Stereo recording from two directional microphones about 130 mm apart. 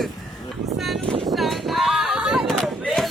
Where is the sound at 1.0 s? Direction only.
45° right (ahead or behind).